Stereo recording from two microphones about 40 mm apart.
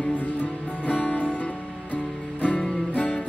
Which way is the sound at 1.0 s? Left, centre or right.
Left.